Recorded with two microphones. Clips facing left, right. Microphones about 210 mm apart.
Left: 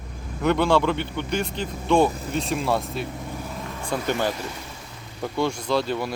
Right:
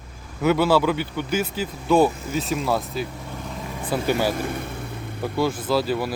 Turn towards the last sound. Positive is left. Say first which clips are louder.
# right 2 dB
turn(degrees=-5)  # may be behind; listen again after turning